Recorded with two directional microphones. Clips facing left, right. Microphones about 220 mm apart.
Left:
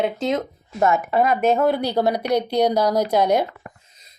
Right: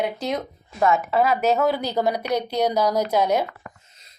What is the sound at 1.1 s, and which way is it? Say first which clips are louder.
Speech: left 1 dB; 5° right (ahead or behind).